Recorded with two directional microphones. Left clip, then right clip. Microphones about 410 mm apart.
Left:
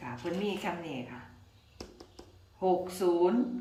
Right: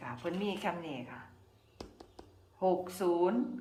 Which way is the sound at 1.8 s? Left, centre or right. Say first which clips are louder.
Left 2 dB; centre.